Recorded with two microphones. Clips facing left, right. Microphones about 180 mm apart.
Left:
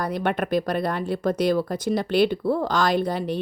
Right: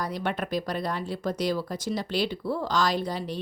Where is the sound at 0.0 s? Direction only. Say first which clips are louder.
Left 5 dB; 55° left (ahead or behind).